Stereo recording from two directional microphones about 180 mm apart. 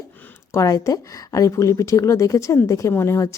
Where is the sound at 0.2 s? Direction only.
15° left (ahead or behind).